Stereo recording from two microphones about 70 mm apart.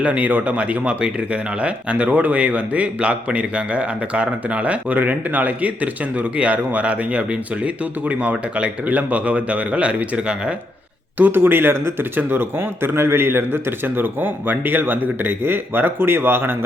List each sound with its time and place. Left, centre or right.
0.0 s speech: right
11.2 s speech: right